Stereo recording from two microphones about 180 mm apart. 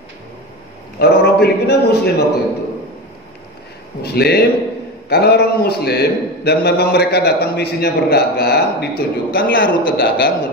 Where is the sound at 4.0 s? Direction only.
65° left (ahead or behind).